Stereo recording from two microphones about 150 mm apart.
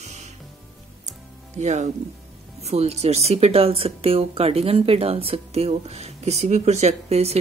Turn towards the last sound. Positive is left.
turn(degrees=-45)  # may be behind; listen again after turning